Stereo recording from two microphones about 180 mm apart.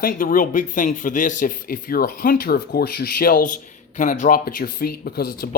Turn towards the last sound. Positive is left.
turn(degrees=55)  # may be behind; listen again after turning